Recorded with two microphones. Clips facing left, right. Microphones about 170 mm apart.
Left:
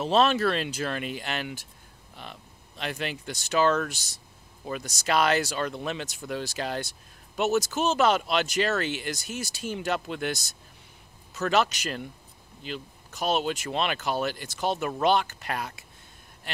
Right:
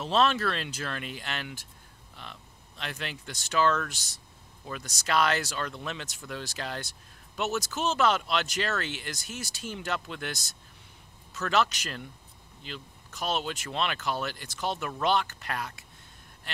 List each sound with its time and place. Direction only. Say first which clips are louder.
0.1 s speech: left 3 dB; 10° left (ahead or behind)
2.8 s speech: left 5 dB; 10° left (ahead or behind)
13.3 s speech: left 5 dB; 10° left (ahead or behind)